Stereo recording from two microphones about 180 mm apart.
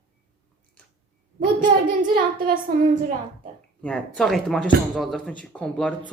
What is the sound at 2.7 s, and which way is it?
Speech, 55° right (ahead or behind).